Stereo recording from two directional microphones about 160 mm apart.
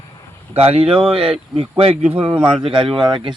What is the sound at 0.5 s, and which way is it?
Speech, 40° right (ahead or behind).